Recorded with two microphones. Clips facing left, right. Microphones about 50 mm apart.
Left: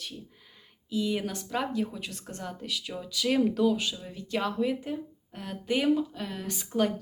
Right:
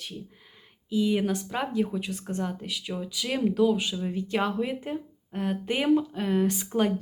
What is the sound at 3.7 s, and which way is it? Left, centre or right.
Speech, right.